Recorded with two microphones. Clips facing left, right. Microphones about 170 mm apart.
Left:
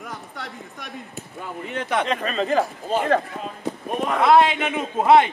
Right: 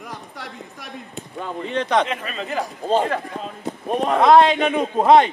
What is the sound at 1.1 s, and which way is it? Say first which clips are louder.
Speech: right 7 dB; 25° right (ahead or behind).